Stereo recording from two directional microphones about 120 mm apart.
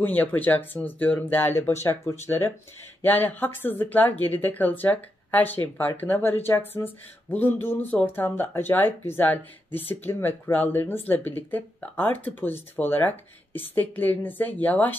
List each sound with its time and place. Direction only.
0.0 s speech: 15° left (ahead or behind)